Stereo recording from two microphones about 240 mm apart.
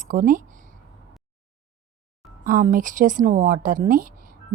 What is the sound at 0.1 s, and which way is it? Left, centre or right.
Speech, right.